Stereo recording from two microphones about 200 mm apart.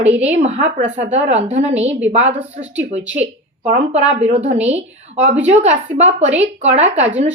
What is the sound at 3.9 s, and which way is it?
A woman's voice, 35° right (ahead or behind).